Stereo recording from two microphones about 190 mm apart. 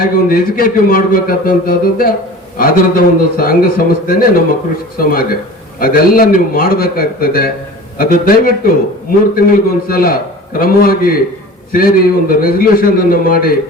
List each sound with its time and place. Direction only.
0.0 s a man's voice: 50° left (ahead or behind)